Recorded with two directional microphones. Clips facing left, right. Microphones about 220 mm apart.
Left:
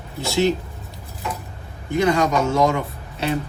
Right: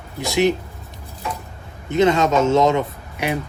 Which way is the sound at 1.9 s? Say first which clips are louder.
Right 2 dB; 20° right (ahead or behind).